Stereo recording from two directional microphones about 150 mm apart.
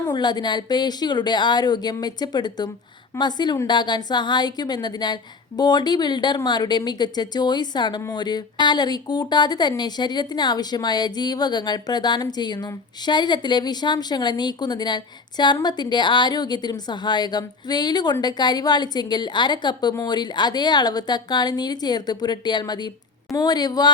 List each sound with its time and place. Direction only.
0.1 s a woman's voice: 30° left (ahead or behind)